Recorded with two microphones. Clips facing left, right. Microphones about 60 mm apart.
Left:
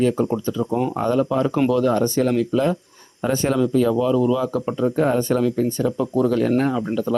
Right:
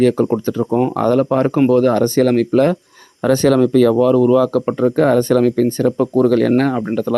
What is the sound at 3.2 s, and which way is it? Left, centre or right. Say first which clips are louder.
Speech: right 7 dB; right.